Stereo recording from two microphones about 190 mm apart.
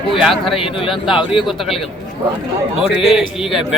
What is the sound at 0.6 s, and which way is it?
Speech, 25° left (ahead or behind).